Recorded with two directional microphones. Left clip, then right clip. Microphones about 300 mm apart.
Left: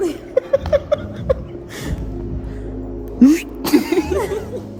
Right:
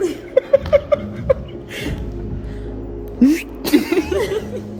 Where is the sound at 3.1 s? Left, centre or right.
Centre.